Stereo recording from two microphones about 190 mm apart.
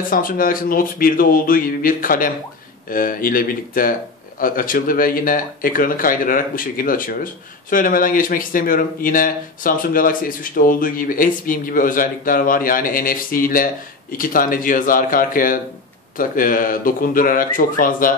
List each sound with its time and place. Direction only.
0.1 s speech: 50° left (ahead or behind)